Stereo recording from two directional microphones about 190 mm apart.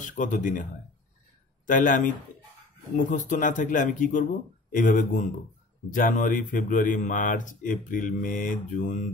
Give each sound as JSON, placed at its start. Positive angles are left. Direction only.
{"t": 0.0, "sound": "speech", "side_deg": 40}
{"t": 1.7, "sound": "speech", "side_deg": 45}